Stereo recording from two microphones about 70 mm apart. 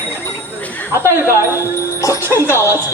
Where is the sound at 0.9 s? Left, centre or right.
Right.